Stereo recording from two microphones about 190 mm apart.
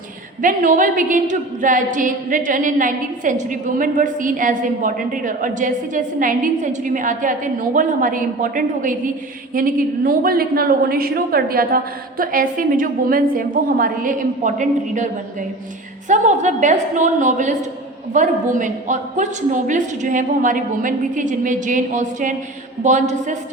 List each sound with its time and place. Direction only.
0.4 s a woman's voice: 45° right (ahead or behind)
16.0 s a woman's voice: 40° right (ahead or behind)